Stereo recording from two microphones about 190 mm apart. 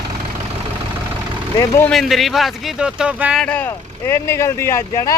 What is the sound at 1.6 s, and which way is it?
Speech, 15° left (ahead or behind).